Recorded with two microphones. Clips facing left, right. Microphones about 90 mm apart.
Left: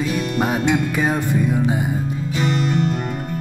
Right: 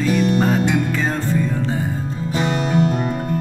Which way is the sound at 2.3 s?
40° right (ahead or behind).